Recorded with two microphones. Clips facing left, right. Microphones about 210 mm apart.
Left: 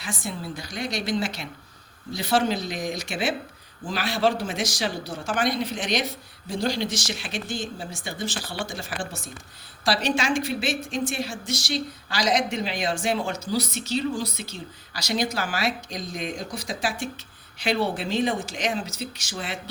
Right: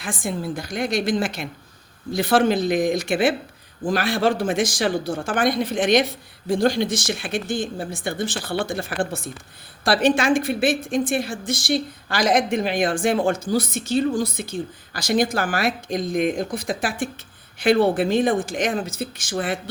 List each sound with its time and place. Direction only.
0.0 s a woman's voice: 50° right (ahead or behind)